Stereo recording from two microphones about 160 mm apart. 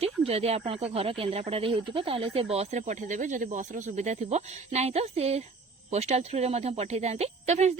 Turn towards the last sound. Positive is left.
turn(degrees=-45)  # may be behind; listen again after turning